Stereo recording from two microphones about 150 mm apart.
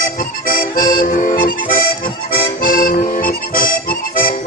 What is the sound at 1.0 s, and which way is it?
Accordion, 60° left (ahead or behind).